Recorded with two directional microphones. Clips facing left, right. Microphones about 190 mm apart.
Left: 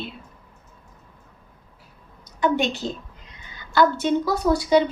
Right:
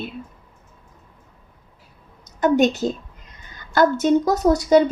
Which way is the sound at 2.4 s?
45° right (ahead or behind).